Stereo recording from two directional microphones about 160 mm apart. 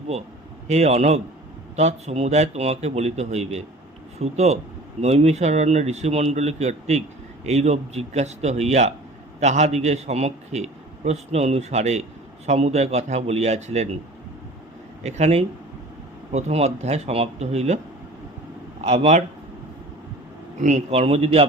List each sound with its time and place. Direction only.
0.7 s a man's voice: 40° right (ahead or behind)
15.0 s a man's voice: 40° right (ahead or behind)
18.8 s a man's voice: 40° right (ahead or behind)
20.6 s speech: 45° right (ahead or behind)